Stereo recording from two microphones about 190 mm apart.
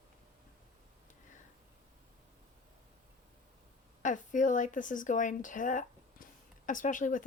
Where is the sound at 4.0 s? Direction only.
40° left (ahead or behind).